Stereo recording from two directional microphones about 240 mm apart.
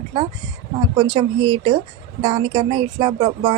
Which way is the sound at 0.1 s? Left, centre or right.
Centre.